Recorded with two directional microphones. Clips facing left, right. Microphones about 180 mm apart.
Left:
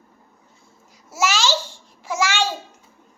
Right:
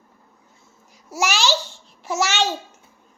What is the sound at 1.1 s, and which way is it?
Babbling, 15° right (ahead or behind).